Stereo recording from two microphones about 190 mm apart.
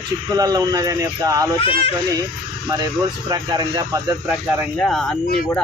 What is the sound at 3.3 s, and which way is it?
Speech, 20° right (ahead or behind).